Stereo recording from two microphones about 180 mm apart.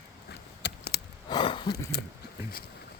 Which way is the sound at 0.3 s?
65° left (ahead or behind).